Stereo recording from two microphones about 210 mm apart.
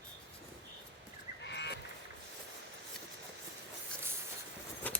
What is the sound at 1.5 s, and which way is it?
Frog, 55° left (ahead or behind).